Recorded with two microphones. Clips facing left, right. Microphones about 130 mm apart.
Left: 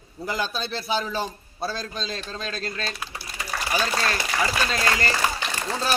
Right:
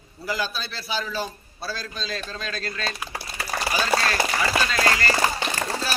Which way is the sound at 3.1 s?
65° right (ahead or behind).